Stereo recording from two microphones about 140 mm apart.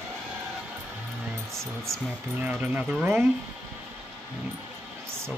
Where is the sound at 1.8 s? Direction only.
20° right (ahead or behind).